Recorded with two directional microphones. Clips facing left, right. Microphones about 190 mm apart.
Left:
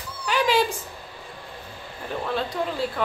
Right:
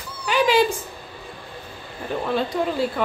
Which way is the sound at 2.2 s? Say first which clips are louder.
Right 4 dB; 5° right (ahead or behind).